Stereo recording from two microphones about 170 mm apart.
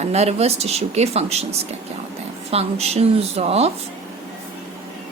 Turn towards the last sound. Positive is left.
turn(degrees=-35)  # may be behind; listen again after turning